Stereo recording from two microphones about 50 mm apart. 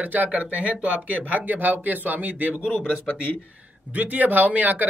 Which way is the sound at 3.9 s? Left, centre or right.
Right.